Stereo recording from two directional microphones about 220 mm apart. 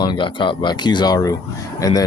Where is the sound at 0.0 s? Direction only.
20° left (ahead or behind).